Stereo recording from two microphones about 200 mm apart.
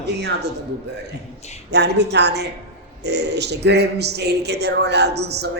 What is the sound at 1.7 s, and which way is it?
Speech, 55° right (ahead or behind).